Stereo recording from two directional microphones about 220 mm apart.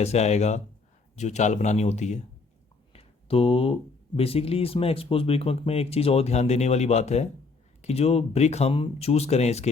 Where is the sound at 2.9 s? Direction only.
25° left (ahead or behind).